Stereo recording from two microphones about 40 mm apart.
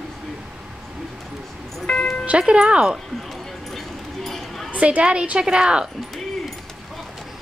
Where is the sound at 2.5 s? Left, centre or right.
Right.